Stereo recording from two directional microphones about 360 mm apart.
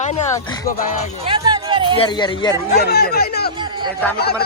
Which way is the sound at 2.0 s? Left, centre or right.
Centre.